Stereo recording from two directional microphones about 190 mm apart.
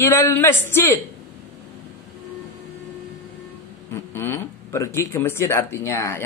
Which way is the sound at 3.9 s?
15° left (ahead or behind).